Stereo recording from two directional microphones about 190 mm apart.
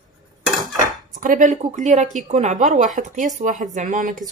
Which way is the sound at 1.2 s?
45° right (ahead or behind).